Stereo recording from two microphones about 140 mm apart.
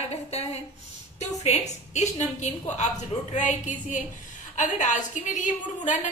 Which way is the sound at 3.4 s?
60° left (ahead or behind).